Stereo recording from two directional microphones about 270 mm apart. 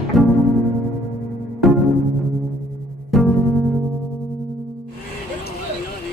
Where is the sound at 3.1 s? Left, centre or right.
Centre.